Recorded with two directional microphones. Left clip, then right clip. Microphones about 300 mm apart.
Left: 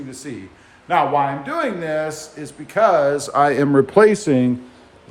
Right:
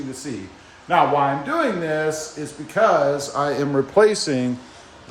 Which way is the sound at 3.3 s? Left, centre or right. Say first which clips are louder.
Left 6 dB; left.